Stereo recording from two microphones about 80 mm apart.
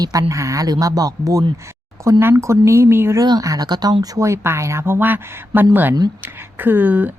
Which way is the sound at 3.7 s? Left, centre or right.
Right.